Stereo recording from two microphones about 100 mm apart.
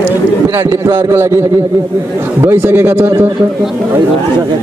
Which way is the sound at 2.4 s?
20° right (ahead or behind).